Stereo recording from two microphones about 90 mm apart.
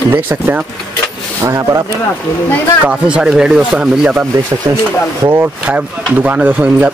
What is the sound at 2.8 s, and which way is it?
Speech, 10° right (ahead or behind).